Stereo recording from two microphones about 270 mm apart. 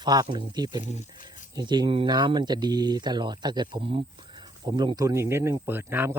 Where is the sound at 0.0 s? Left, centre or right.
Centre.